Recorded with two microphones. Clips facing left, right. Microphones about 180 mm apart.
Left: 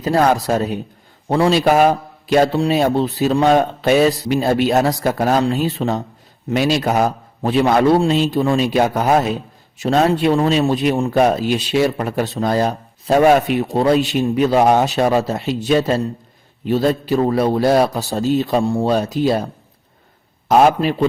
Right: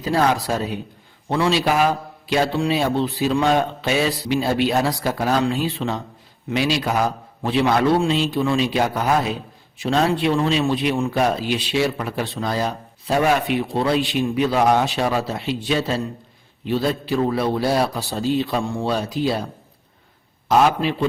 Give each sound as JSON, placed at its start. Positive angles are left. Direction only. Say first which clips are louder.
{"t": 0.0, "sound": "a man's voice", "louder": "left 4 dB", "side_deg": 45}
{"t": 20.5, "sound": "a man's voice", "louder": "left 4 dB", "side_deg": 45}